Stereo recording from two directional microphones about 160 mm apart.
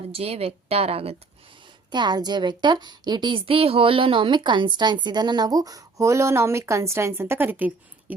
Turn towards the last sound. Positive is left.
turn(degrees=-10)  # may be behind; listen again after turning